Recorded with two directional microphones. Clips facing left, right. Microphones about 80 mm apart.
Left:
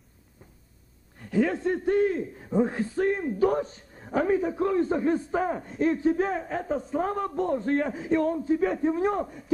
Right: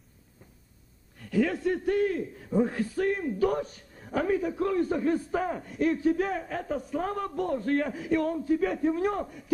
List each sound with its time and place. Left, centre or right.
1.1 s a man's voice: left